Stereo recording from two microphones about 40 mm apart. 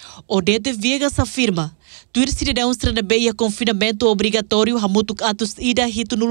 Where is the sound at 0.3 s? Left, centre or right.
Left.